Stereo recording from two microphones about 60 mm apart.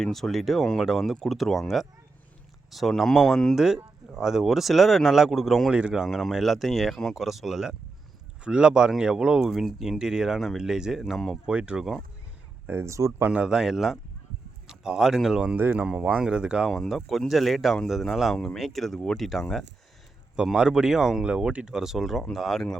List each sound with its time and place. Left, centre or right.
0.0 s speech: centre
9.4 s speech: centre
11.4 s speech: centre
12.8 s speech: right
13.2 s speech: centre
15.5 s speech: right
15.9 s speech: centre
16.6 s speech: centre
20.3 s speech: centre